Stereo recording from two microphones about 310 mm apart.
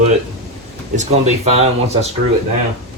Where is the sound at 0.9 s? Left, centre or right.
Right.